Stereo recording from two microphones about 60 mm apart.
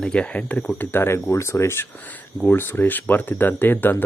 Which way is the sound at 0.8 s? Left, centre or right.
Left.